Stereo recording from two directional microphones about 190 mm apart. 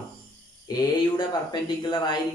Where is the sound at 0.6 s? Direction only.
20° left (ahead or behind).